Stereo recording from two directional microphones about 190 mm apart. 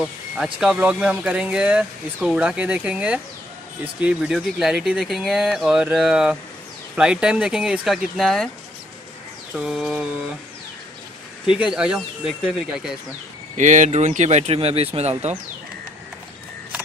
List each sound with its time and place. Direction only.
0.0 s speech: 5° right (ahead or behind)
9.5 s speech: centre (ahead or behind)
11.4 s speech: 5° right (ahead or behind)
13.6 s speech: 40° right (ahead or behind)